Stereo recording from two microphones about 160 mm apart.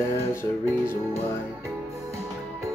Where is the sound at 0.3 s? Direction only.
15° left (ahead or behind).